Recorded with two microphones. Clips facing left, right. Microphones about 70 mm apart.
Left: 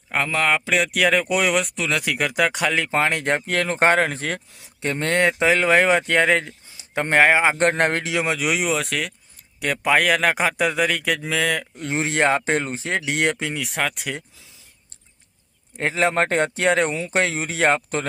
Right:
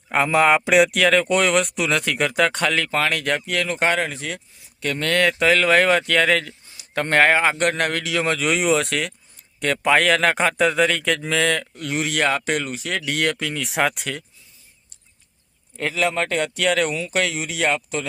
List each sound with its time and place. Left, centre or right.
0.1 s a man's voice: centre
0.9 s speech: centre; by 3.4 s left
3.4 s speech: left
4.8 s speech: left
7.6 s speech: left
8.2 s speech: centre
11.8 s speech: left
13.6 s speech: centre
15.8 s speech: left